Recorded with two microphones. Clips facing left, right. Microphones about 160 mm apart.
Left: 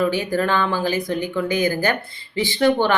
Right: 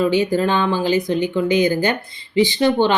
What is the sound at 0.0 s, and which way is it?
Speech, 20° right (ahead or behind).